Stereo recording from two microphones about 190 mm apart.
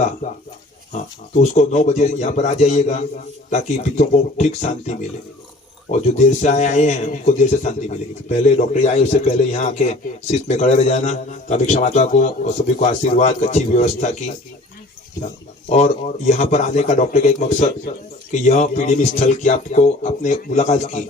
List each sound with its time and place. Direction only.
0.9 s speech: 40° left (ahead or behind)
15.7 s speech: 40° left (ahead or behind)